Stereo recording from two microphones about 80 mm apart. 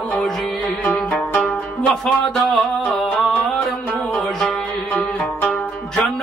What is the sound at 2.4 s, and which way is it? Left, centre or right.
Music, centre.